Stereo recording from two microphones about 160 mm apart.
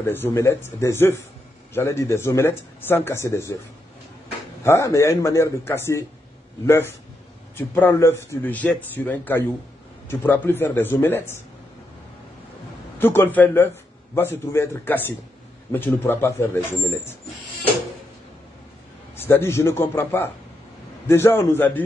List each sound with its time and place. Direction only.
0.0 s speech: 15° left (ahead or behind)
4.6 s speech: 20° left (ahead or behind)
13.0 s speech: 15° left (ahead or behind)
19.1 s speech: 15° left (ahead or behind)